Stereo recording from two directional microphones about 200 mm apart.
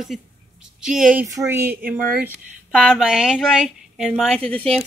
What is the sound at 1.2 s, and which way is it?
A woman's voice, 15° right (ahead or behind).